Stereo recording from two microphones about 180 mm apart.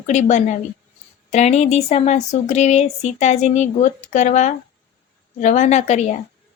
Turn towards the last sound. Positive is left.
turn(degrees=40)  # may be behind; listen again after turning